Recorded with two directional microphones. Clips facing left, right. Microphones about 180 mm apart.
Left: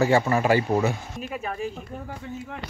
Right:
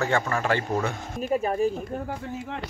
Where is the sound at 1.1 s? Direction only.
40° right (ahead or behind).